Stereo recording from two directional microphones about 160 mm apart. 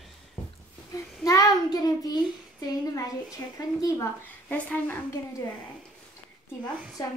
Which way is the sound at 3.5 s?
20° left (ahead or behind).